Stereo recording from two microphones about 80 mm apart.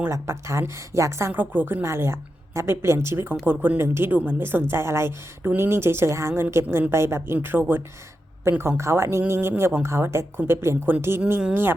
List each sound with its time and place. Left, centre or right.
0.1 s speech: right
1.3 s speech: right